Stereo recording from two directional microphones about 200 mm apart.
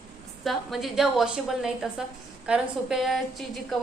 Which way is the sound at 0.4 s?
Centre (ahead or behind).